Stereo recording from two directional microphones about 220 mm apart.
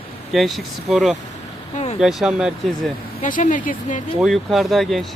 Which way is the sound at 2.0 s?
Centre (ahead or behind).